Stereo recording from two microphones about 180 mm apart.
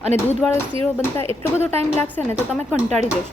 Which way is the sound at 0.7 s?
30° right (ahead or behind).